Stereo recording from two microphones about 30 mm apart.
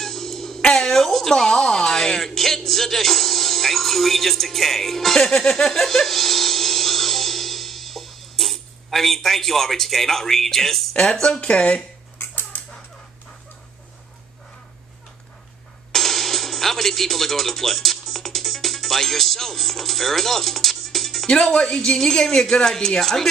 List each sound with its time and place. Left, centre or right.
0.0 s music: centre
0.6 s speech: left
1.3 s speech: centre
5.7 s dental drill: centre
10.9 s speech: left
15.9 s music: centre
21.5 s a woman's voice: left